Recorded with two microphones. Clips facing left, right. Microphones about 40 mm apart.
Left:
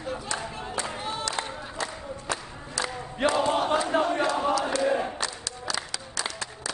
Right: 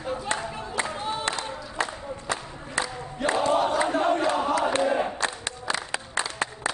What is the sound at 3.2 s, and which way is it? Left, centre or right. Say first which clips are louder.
Crowd: left 1 dB; left.